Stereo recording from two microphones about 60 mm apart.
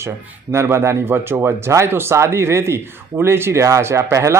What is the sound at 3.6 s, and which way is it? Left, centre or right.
Speech, right.